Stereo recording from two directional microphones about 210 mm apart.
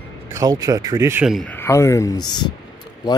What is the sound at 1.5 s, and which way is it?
Speech, 15° left (ahead or behind).